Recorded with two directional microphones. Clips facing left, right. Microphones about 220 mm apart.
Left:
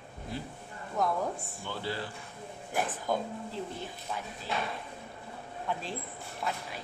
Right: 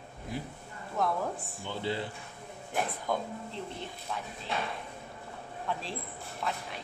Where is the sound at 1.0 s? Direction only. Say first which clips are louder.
Left 1 dB; centre (ahead or behind).